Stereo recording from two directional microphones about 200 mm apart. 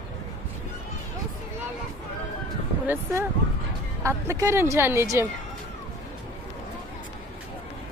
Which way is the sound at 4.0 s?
15° right (ahead or behind).